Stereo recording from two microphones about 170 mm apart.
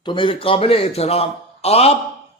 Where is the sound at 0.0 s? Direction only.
30° left (ahead or behind).